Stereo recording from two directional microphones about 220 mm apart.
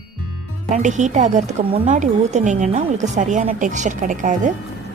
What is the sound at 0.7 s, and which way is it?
Speech, 35° right (ahead or behind).